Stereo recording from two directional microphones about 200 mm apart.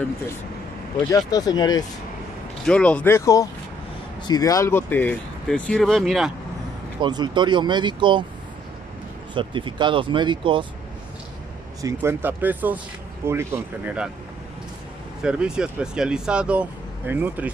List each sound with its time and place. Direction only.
1.1 s speech: 20° left (ahead or behind)
2.6 s speech: 5° left (ahead or behind)
7.0 s speech: 20° right (ahead or behind)
9.3 s speech: 25° right (ahead or behind)
11.8 s speech: 10° right (ahead or behind)
15.2 s speech: 5° right (ahead or behind)